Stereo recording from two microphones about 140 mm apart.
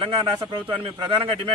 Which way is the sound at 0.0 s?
40° right (ahead or behind).